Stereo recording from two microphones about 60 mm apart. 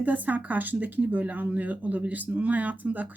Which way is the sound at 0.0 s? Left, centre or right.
Right.